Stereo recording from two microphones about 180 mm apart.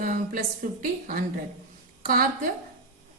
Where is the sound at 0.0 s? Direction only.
50° right (ahead or behind).